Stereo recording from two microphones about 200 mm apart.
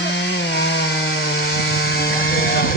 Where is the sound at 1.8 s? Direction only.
50° left (ahead or behind).